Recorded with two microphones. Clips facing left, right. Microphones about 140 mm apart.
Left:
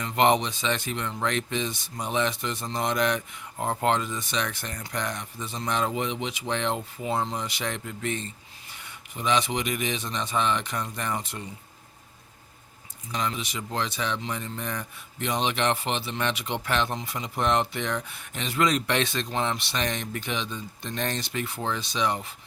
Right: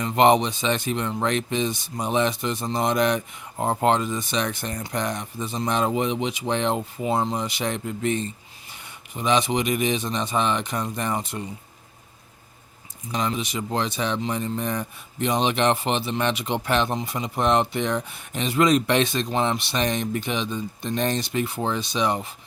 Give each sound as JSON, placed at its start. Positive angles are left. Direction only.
{"t": 0.0, "sound": "speech", "side_deg": -25}
{"t": 13.1, "sound": "speech", "side_deg": -20}